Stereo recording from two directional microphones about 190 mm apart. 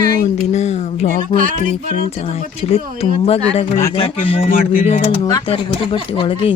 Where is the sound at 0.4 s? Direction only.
35° left (ahead or behind).